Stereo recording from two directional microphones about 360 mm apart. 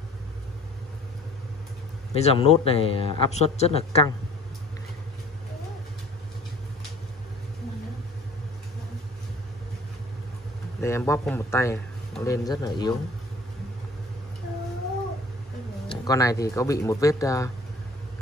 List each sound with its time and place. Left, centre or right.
2.1 s a man's voice: centre
10.8 s a man's voice: centre
15.9 s a man's voice: centre